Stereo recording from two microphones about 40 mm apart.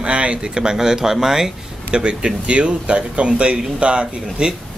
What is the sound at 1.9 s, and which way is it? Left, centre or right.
Speech, right.